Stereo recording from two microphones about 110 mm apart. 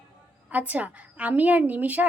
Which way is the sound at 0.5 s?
15° right (ahead or behind).